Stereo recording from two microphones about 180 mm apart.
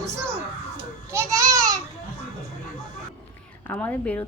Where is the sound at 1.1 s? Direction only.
20° right (ahead or behind).